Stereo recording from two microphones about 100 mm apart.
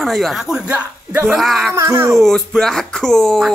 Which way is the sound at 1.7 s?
25° right (ahead or behind).